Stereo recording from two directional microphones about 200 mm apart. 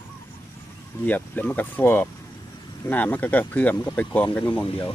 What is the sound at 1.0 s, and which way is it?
Speech, 10° left (ahead or behind).